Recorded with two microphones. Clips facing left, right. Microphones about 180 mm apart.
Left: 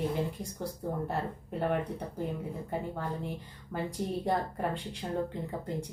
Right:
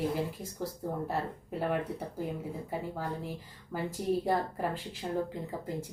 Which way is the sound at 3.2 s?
5° right (ahead or behind).